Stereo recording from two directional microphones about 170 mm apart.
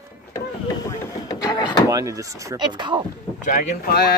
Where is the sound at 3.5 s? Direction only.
50° left (ahead or behind); by 4.1 s 65° left (ahead or behind).